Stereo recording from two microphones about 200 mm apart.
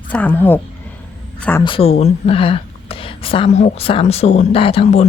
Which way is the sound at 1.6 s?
30° left (ahead or behind).